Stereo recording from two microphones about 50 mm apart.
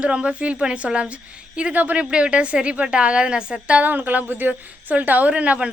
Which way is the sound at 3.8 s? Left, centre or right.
Right.